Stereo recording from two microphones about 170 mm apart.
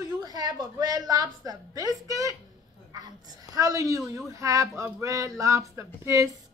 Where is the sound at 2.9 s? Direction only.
20° right (ahead or behind).